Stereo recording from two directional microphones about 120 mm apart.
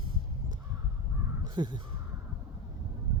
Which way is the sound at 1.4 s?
40° right (ahead or behind).